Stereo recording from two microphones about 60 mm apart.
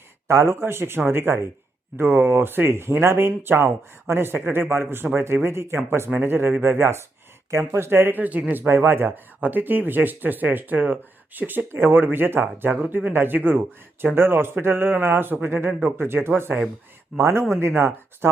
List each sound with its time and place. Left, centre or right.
0.3 s speech: right